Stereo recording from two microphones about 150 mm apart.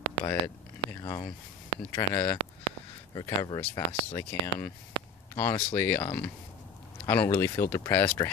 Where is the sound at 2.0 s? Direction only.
15° left (ahead or behind).